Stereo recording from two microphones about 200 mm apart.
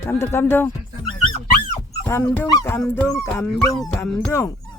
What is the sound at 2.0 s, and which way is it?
Speech, 15° left (ahead or behind).